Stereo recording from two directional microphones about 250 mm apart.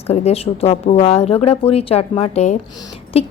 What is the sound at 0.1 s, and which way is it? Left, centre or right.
A woman's voice, left.